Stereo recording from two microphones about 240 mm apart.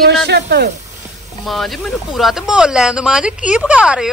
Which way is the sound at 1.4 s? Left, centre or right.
Centre.